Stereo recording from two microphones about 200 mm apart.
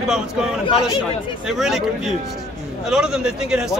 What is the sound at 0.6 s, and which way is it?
Speech, 25° left (ahead or behind).